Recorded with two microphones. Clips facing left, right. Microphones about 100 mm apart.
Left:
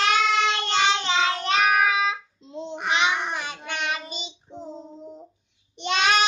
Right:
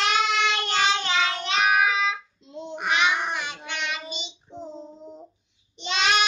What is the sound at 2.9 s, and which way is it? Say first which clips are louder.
Babbling: even; 30° left (ahead or behind).